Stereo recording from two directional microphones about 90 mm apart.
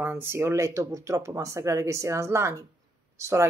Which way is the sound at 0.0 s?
25° right (ahead or behind).